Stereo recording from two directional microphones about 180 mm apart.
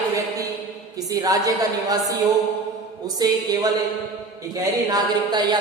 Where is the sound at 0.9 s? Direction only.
20° right (ahead or behind).